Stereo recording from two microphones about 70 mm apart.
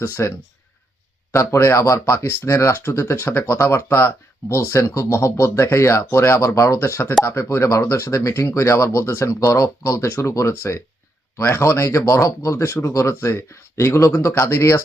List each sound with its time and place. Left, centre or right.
0.0 s speech: left